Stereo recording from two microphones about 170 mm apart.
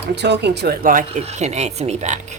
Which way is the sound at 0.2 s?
85° right.